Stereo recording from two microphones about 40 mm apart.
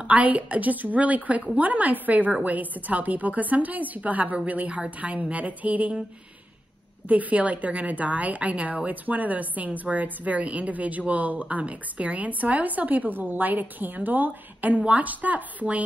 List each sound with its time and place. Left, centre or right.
0.0 s a woman's voice: right
7.1 s a woman's voice: right